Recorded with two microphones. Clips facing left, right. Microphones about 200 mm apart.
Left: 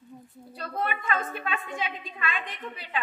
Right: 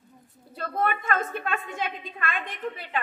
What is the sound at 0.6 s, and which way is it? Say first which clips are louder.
A woman's voice: right 4 dB; 50° right (ahead or behind).